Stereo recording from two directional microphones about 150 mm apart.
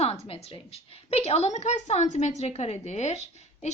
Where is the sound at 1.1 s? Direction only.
45° left (ahead or behind).